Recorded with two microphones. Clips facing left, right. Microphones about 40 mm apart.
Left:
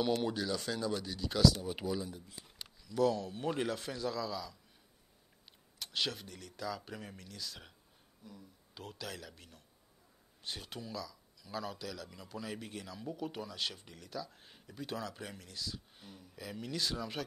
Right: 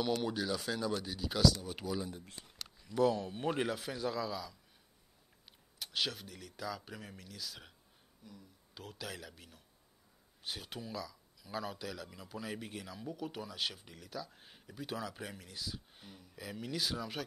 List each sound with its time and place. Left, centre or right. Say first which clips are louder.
0.2 s speech: left 1 dB; centre
1.5 s speech: left 2 dB; centre
2.8 s speech: even; centre
5.8 s speech: even; centre